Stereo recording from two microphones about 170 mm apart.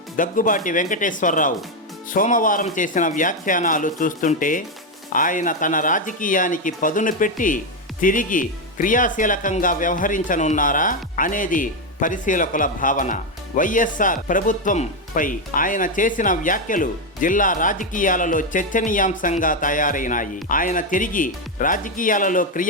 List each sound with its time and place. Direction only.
0.2 s speech: 50° left (ahead or behind)